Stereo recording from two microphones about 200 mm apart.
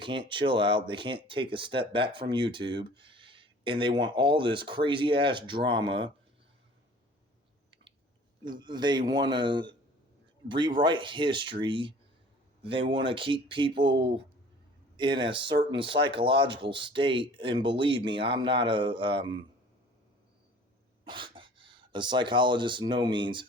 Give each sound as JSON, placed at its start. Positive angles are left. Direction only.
{"t": 0.0, "sound": "speech", "side_deg": -25}
{"t": 8.4, "sound": "speech", "side_deg": -20}
{"t": 21.0, "sound": "speech", "side_deg": -25}